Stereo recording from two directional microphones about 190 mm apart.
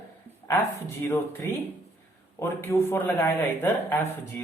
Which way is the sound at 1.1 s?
10° left (ahead or behind).